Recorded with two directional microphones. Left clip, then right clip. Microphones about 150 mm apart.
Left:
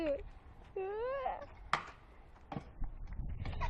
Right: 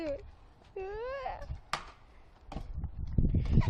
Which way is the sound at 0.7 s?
Centre (ahead or behind).